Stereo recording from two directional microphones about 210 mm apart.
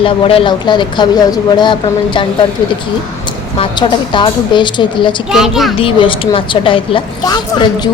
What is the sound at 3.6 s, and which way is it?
A woman's voice, 20° left (ahead or behind).